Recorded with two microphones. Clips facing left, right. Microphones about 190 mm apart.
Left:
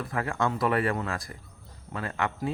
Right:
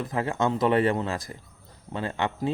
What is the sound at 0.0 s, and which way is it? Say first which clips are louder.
Speech: right 3 dB; 20° right (ahead or behind).